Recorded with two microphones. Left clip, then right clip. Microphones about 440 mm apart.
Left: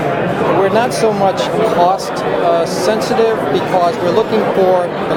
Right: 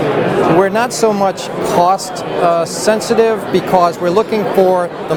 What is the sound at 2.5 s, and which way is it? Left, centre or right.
Speech, right.